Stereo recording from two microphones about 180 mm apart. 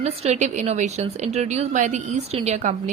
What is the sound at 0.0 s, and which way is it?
A woman's voice, 35° right (ahead or behind).